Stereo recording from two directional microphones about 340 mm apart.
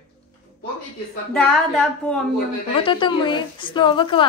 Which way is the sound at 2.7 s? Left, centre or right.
Centre.